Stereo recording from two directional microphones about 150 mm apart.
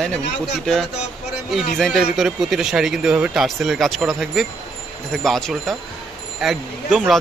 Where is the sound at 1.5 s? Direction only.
Centre (ahead or behind).